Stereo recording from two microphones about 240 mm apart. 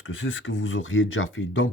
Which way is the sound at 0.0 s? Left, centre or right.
Left.